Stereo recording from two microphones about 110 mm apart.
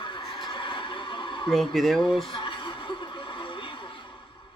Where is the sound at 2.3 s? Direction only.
50° left (ahead or behind).